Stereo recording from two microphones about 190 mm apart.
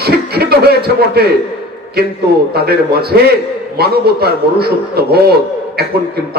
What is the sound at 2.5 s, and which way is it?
A man's voice, 55° right (ahead or behind).